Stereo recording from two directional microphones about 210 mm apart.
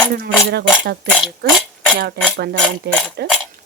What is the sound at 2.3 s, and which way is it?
Speech, 45° right (ahead or behind).